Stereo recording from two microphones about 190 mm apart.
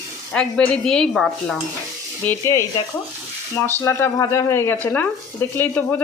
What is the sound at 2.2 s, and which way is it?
Speech, 15° left (ahead or behind).